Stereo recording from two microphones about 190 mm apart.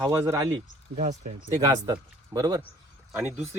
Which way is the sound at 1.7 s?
20° right (ahead or behind).